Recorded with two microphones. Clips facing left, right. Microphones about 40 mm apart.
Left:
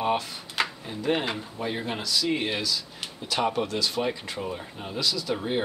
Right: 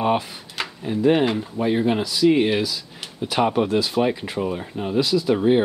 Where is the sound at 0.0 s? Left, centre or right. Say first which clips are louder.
Right 5 dB; centre.